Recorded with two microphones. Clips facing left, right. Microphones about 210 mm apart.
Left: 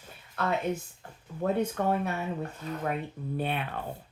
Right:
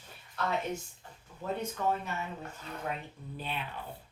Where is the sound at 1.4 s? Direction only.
60° left (ahead or behind).